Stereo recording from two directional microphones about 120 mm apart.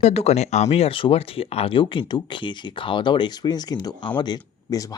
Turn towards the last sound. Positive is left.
turn(degrees=30)  # may be behind; listen again after turning